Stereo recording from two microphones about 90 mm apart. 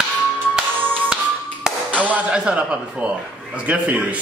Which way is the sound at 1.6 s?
15° right (ahead or behind).